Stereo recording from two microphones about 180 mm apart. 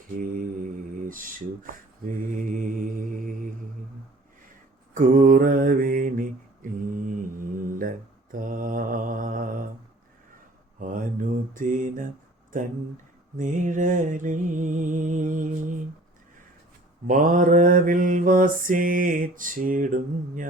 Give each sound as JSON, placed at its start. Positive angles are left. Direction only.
{"t": 1.0, "sound": "speech", "side_deg": -50}
{"t": 2.4, "sound": "mantra", "side_deg": -45}
{"t": 4.9, "sound": "mantra", "side_deg": -45}
{"t": 10.8, "sound": "mantra", "side_deg": -45}
{"t": 13.3, "sound": "music", "side_deg": -45}
{"t": 17.1, "sound": "mantra", "side_deg": -45}